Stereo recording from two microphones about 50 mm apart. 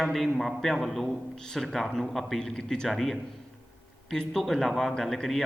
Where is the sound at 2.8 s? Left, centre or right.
Centre.